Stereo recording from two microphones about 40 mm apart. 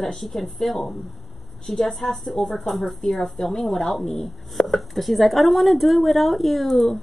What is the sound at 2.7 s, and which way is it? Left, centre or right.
Speech, centre.